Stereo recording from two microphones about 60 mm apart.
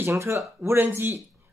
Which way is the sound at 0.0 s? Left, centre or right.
Right.